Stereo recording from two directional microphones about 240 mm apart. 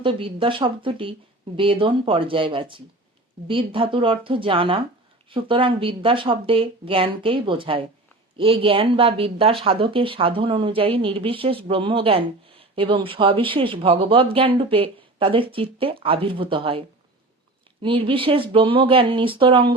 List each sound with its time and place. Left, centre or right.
0.0 s speech: right
17.8 s speech: right